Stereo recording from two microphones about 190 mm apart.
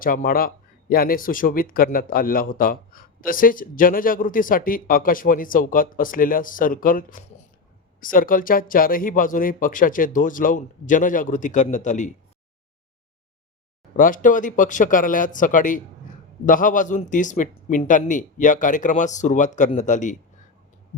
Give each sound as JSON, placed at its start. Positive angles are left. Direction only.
{"t": 0.0, "sound": "speech", "side_deg": 50}
{"t": 13.9, "sound": "speech", "side_deg": 45}